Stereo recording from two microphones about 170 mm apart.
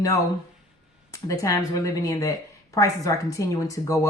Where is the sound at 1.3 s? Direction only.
20° left (ahead or behind).